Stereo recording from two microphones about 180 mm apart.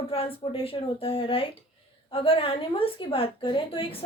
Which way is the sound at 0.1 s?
30° left (ahead or behind).